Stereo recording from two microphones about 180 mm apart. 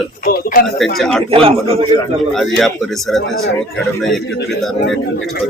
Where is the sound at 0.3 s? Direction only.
55° left (ahead or behind).